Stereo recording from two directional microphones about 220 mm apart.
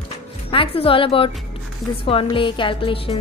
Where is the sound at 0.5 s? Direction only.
25° left (ahead or behind).